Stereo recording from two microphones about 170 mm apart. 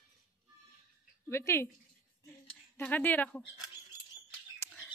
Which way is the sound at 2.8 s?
10° left (ahead or behind).